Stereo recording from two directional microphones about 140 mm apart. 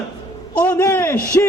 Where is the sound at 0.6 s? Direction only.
15° left (ahead or behind).